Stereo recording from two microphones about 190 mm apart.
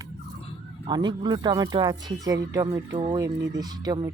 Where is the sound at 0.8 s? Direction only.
25° right (ahead or behind).